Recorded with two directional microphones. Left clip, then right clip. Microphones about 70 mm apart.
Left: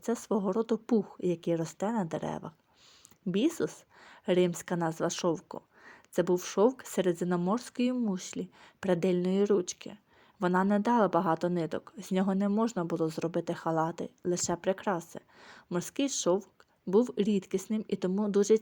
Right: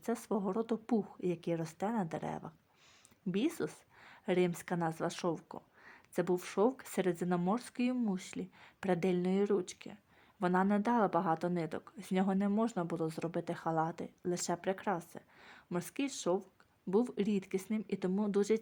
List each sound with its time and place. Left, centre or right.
0.0 s a woman's voice: left